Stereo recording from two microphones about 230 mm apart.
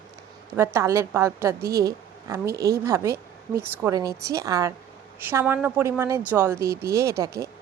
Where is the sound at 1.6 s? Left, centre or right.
Right.